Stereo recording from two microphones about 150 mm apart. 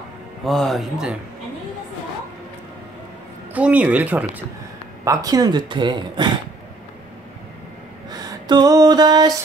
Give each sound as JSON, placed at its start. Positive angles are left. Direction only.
{"t": 0.5, "sound": "speech", "side_deg": 0}
{"t": 3.5, "sound": "speech", "side_deg": -10}
{"t": 5.0, "sound": "speech", "side_deg": -25}
{"t": 8.1, "sound": "a sound", "side_deg": -25}